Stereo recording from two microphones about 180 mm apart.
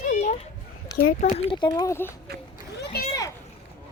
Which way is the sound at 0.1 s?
45° left (ahead or behind).